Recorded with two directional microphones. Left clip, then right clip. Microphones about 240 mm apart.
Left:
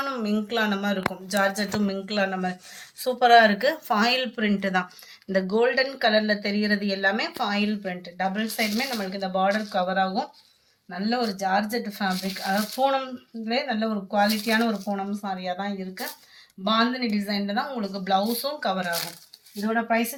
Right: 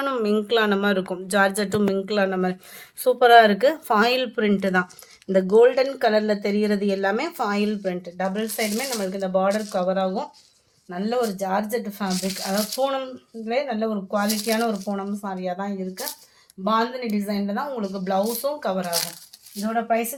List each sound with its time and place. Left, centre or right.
0.0 s speech: right